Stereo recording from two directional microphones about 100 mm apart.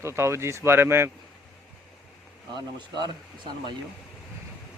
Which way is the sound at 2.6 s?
50° right (ahead or behind).